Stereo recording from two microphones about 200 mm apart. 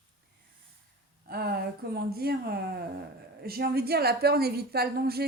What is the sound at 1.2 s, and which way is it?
A woman's voice, 50° right (ahead or behind).